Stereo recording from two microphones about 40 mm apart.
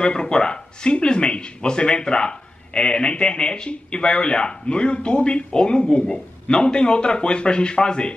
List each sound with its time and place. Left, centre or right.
0.0 s speech: left